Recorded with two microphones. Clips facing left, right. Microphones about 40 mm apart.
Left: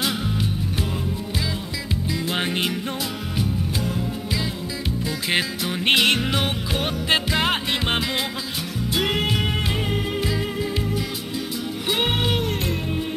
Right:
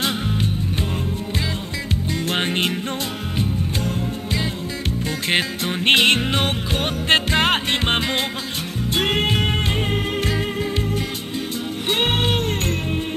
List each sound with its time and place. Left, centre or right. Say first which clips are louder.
2.3 s music: right 3 dB; right
5.3 s music: right 2 dB; right
11.9 s music: right 2 dB; right